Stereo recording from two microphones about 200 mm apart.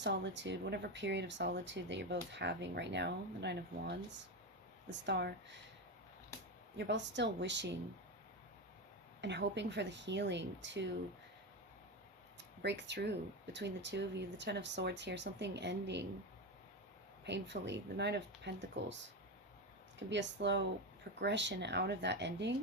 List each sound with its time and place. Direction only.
0.0 s speech: 60° right (ahead or behind)
6.7 s speech: 60° right (ahead or behind)
9.2 s speech: 60° right (ahead or behind)
12.4 s speech: 60° right (ahead or behind)
17.2 s speech: 60° right (ahead or behind)
20.0 s speech: 60° right (ahead or behind)